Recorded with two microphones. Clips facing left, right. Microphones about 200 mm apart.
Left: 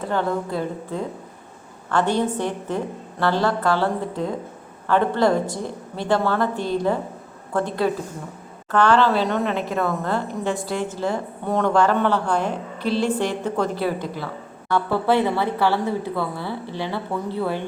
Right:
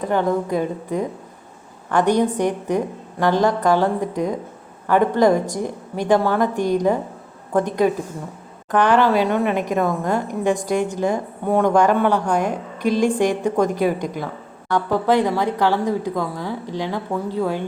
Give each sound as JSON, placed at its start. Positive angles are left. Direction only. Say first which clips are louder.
{"t": 0.0, "sound": "a woman's voice", "louder": "right 4 dB", "side_deg": -15}